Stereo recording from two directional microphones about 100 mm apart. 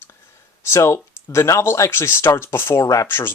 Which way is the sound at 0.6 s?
30° left (ahead or behind).